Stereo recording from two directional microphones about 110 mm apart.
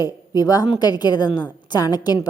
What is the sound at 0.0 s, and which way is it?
A woman's voice, 35° left (ahead or behind).